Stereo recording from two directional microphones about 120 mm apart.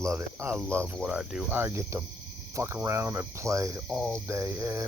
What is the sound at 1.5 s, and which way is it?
Speech, 15° right (ahead or behind).